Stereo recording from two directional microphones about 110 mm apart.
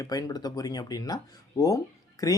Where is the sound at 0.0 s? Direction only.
35° left (ahead or behind).